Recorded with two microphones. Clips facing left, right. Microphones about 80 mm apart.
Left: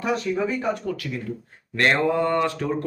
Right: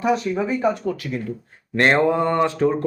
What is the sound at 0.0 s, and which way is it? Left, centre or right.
A man's voice, centre.